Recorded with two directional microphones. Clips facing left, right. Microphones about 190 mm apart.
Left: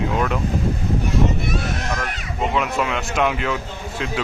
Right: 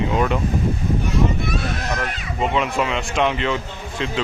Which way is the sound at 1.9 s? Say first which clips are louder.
Right 1 dB; centre (ahead or behind).